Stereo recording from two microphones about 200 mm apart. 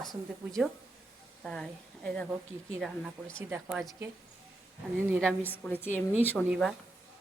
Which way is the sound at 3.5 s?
10° right (ahead or behind).